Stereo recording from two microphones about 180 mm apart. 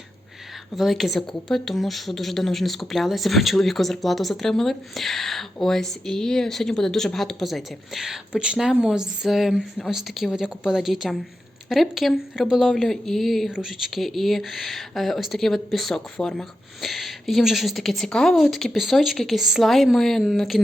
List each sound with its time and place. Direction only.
0.8 s a woman's voice: centre (ahead or behind)